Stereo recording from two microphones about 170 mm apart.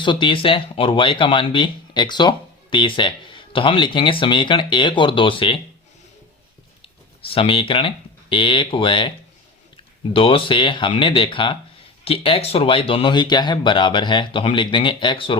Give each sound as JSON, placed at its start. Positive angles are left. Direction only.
{"t": 0.0, "sound": "speech", "side_deg": 25}
{"t": 6.8, "sound": "speech", "side_deg": 30}